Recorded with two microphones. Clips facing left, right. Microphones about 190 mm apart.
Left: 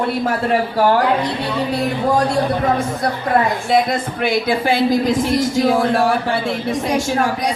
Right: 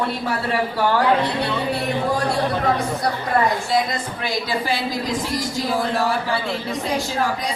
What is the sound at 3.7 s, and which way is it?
Speech, 60° left (ahead or behind).